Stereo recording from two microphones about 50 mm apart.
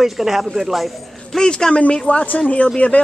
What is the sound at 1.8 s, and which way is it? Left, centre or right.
Speech, left.